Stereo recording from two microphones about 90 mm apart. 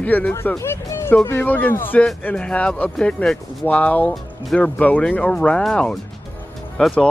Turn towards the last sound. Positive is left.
turn(degrees=5)  # may be behind; listen again after turning